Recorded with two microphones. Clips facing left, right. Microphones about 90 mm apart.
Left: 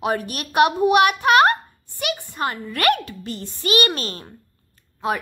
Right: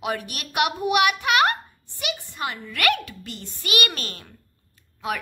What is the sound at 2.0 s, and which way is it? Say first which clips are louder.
A child's voice: left 5 dB; 45° left (ahead or behind).